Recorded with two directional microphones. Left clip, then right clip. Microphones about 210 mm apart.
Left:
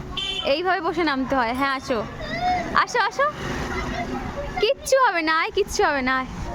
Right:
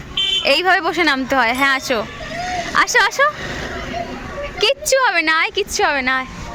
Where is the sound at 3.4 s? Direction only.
55° left (ahead or behind).